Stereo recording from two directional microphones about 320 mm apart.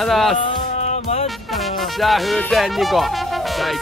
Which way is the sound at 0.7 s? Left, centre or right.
Left.